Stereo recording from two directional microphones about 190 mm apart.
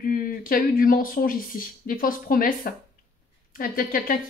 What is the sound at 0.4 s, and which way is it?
Speech, 50° left (ahead or behind).